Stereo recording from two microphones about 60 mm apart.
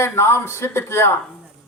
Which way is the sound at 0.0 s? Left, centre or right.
Left.